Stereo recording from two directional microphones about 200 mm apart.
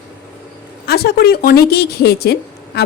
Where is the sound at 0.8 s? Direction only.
50° left (ahead or behind).